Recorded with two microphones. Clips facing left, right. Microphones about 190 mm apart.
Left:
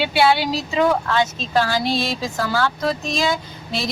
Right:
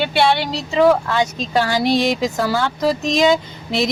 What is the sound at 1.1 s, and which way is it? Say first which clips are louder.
Speech: right 1 dB; 15° right (ahead or behind).